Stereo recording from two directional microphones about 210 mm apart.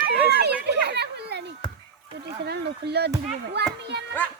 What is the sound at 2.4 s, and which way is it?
Speech, 50° right (ahead or behind).